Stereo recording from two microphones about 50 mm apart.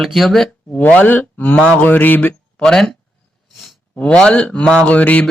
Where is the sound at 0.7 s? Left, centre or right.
Left.